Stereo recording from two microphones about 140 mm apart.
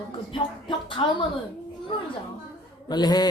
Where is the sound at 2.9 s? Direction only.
30° left (ahead or behind).